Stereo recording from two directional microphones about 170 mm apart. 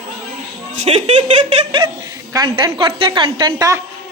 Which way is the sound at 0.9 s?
35° right (ahead or behind).